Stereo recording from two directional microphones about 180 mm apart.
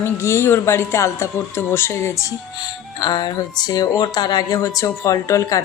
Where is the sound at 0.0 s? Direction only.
15° left (ahead or behind).